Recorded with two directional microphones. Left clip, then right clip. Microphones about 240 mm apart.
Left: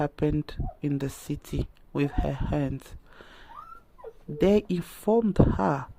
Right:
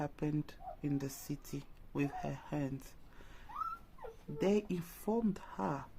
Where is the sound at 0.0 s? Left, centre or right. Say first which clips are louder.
Left 12 dB; left.